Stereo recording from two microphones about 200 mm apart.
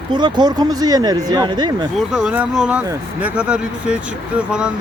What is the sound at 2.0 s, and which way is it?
Speech, 5° right (ahead or behind).